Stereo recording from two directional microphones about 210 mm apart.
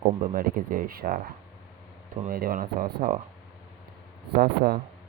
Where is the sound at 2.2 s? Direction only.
45° right (ahead or behind).